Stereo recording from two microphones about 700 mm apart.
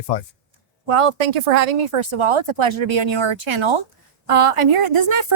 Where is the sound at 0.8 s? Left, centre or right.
Right.